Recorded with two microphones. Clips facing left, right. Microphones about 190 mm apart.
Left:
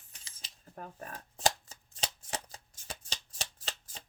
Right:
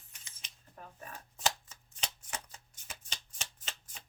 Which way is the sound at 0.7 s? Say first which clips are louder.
Left 5 dB; 50° left (ahead or behind).